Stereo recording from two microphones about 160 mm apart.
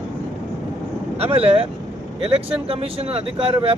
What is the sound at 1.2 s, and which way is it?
Speech, 35° right (ahead or behind).